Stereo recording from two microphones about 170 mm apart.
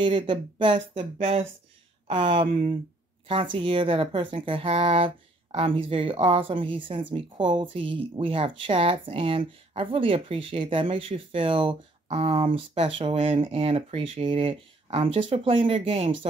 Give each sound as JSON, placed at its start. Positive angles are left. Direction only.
{"t": 0.0, "sound": "speech", "side_deg": -30}
{"t": 0.7, "sound": "speech", "side_deg": -45}
{"t": 2.0, "sound": "speech", "side_deg": -30}